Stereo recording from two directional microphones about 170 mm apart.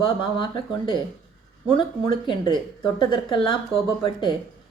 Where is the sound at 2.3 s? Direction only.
25° left (ahead or behind).